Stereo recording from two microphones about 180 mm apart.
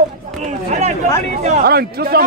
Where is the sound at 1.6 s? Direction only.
60° right (ahead or behind).